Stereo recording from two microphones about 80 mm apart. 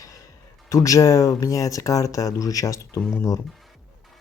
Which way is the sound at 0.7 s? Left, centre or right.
Left.